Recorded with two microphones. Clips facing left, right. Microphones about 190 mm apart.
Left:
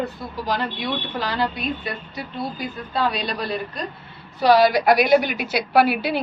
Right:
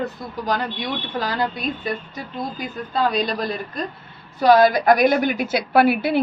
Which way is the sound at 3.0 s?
45° right (ahead or behind).